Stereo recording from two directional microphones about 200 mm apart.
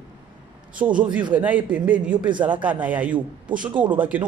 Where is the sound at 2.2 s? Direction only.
25° right (ahead or behind).